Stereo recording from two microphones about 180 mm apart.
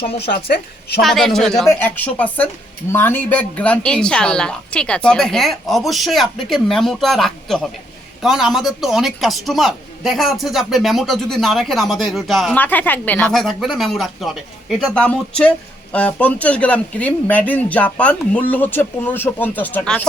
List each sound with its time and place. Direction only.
0.2 s a woman's voice: 60° left (ahead or behind)
1.0 s a woman's voice: centre (ahead or behind)